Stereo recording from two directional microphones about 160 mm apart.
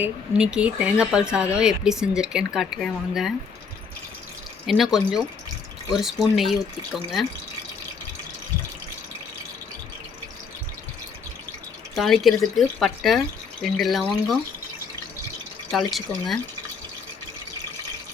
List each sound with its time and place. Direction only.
0.0 s speech: 5° right (ahead or behind)
4.6 s speech: centre (ahead or behind)
11.9 s speech: centre (ahead or behind)
15.7 s speech: centre (ahead or behind)